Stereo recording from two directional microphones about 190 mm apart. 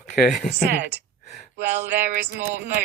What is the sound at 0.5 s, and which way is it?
Speech, 65° right (ahead or behind).